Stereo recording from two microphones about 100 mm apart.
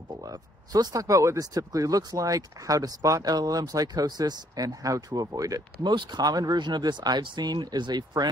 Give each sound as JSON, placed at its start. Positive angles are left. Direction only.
{"t": 0.2, "sound": "speech", "side_deg": -40}